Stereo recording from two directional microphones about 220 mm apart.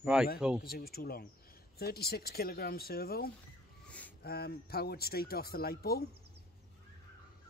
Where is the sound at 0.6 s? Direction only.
45° left (ahead or behind).